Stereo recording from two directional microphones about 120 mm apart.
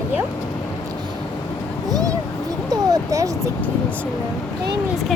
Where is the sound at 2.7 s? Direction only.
30° right (ahead or behind).